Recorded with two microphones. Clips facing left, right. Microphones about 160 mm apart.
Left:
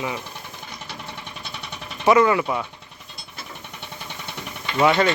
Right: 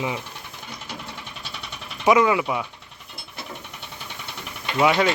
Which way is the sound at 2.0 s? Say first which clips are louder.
Left 1 dB; 10° right (ahead or behind).